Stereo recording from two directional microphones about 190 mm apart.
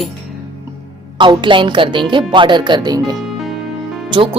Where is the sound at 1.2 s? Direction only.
25° right (ahead or behind).